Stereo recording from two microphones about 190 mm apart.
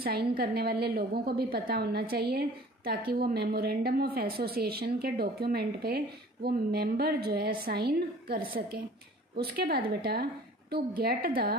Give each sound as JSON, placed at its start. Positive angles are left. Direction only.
{"t": 0.0, "sound": "a woman's voice", "side_deg": -55}